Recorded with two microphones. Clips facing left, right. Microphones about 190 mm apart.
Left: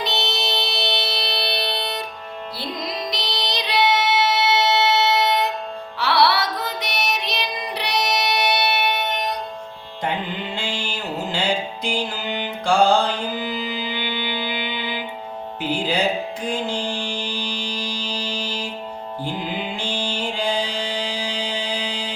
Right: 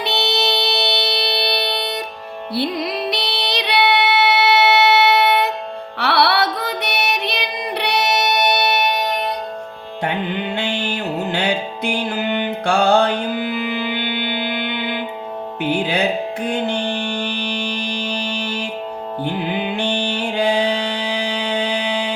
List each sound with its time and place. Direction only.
0.0 s music: 70° right (ahead or behind); by 9.1 s 40° right (ahead or behind)
10.0 s music: 65° right (ahead or behind)